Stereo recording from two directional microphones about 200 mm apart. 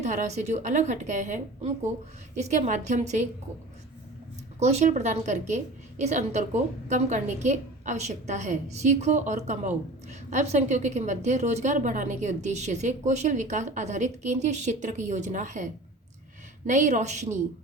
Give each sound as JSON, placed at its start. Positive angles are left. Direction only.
{"t": 0.0, "sound": "a woman's voice", "side_deg": -35}
{"t": 4.6, "sound": "a woman's voice", "side_deg": -35}